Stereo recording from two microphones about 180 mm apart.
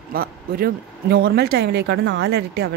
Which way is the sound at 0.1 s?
55° right (ahead or behind).